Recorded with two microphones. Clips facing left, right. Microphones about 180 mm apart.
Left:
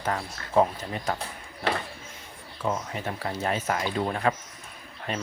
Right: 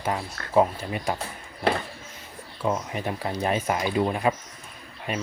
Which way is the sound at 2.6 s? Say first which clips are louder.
Right 3 dB; 15° right (ahead or behind).